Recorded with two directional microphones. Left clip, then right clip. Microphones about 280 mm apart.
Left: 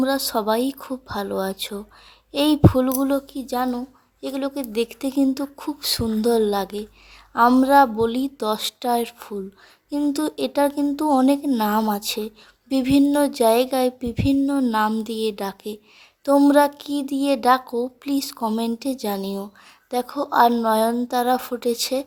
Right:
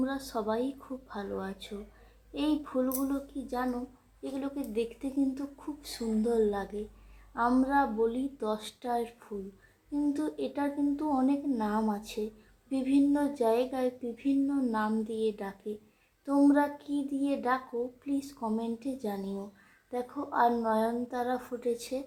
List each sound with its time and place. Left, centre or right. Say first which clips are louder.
0.0 s speech: left 12 dB; left